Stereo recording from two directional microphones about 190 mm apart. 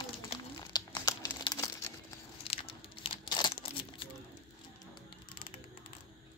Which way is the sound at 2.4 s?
30° left (ahead or behind).